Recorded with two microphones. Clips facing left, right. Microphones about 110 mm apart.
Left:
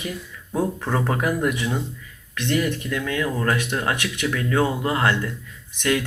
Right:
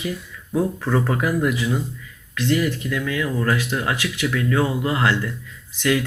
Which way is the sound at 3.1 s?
30° left (ahead or behind).